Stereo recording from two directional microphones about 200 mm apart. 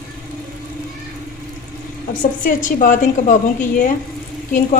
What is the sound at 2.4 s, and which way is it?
A woman's voice, 40° left (ahead or behind).